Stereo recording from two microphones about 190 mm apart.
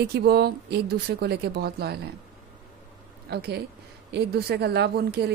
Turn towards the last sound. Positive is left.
turn(degrees=-60)  # may be behind; listen again after turning